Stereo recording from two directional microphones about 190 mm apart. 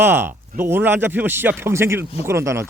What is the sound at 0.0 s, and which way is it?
Speech, 10° right (ahead or behind).